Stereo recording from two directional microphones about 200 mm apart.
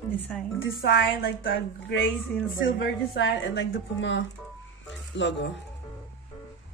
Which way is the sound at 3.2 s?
65° left (ahead or behind).